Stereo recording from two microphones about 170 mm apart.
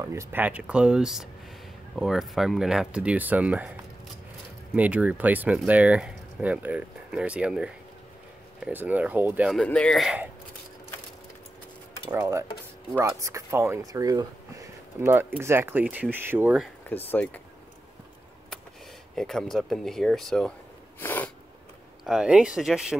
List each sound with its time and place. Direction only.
0.0 s speech: 15° right (ahead or behind)
4.7 s speech: 10° right (ahead or behind)
9.5 s speech: 5° left (ahead or behind)
12.1 s speech: 15° right (ahead or behind)
16.9 s speech: 10° left (ahead or behind)
19.1 s speech: 5° left (ahead or behind)
21.0 s sneeze: 10° left (ahead or behind)
22.0 s speech: 5° right (ahead or behind)